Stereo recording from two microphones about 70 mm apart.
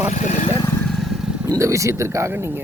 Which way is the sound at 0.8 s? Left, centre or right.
Centre.